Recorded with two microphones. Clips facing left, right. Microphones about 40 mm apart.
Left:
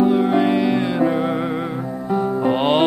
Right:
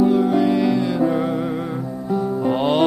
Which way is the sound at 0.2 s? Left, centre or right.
Left.